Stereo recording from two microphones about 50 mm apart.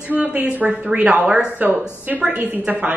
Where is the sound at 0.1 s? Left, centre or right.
Right.